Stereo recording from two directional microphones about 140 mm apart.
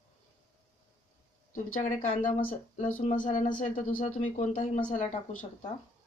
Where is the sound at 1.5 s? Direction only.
65° left (ahead or behind).